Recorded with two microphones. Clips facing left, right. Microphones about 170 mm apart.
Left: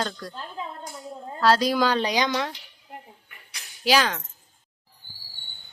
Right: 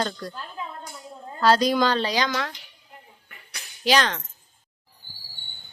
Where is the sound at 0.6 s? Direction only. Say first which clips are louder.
Left 1 dB; 30° left (ahead or behind).